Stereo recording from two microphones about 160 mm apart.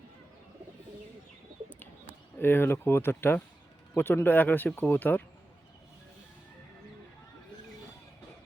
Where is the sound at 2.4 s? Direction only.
15° left (ahead or behind).